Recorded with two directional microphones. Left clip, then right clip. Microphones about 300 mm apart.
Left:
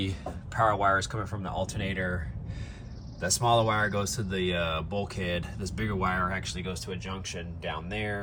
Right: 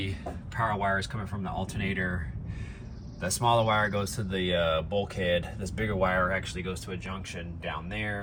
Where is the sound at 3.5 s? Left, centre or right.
Left.